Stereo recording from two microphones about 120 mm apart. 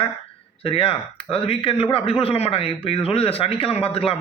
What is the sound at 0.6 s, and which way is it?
Speech, 50° left (ahead or behind).